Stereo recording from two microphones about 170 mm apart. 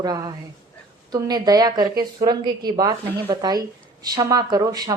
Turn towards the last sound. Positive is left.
turn(degrees=-25)  # may be behind; listen again after turning